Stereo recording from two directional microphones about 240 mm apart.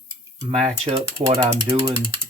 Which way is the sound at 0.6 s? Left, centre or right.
Right.